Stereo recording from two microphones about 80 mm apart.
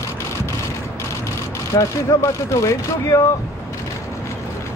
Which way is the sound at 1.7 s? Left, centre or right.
Left.